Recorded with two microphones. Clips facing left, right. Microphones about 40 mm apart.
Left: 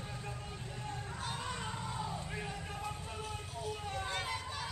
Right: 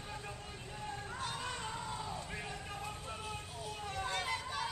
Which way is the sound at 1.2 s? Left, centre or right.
Centre.